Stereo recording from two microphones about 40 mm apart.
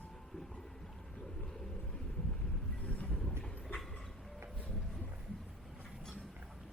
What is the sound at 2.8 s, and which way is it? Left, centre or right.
Boat, left.